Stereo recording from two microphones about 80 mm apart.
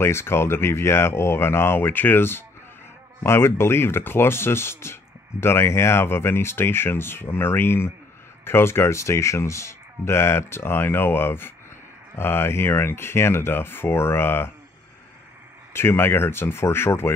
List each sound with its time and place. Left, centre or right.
0.0 s speech: left
15.7 s speech: left